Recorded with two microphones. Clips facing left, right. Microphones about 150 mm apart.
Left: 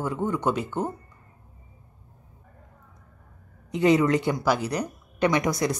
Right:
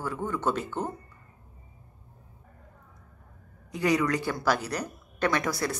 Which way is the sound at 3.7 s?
25° left (ahead or behind).